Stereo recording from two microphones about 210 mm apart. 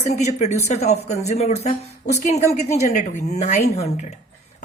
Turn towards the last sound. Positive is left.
turn(degrees=30)  # may be behind; listen again after turning